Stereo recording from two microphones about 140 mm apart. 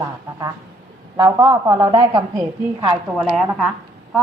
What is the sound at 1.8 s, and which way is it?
Speech, 35° right (ahead or behind).